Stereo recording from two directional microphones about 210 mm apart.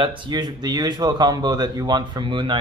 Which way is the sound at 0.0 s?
25° right (ahead or behind).